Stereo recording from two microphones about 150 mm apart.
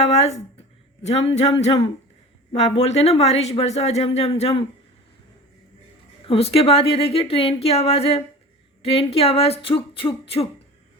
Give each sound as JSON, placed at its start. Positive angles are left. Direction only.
{"t": 0.0, "sound": "speech", "side_deg": 45}
{"t": 6.2, "sound": "a woman's voice", "side_deg": 40}